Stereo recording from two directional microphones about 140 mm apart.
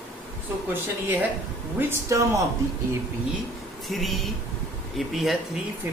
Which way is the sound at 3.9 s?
Centre (ahead or behind).